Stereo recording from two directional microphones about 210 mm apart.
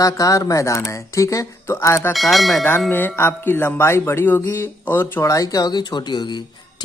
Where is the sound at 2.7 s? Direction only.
10° left (ahead or behind).